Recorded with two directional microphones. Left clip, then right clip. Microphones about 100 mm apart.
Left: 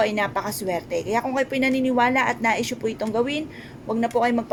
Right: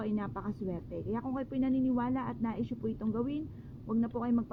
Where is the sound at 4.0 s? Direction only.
45° right (ahead or behind).